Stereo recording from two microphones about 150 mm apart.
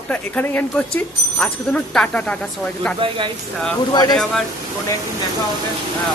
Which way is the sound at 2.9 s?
35° right (ahead or behind).